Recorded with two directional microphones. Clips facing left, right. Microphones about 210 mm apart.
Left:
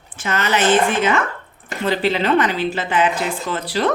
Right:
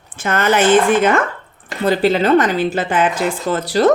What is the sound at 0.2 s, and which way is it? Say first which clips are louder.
Speech: right 5 dB; 50° right (ahead or behind).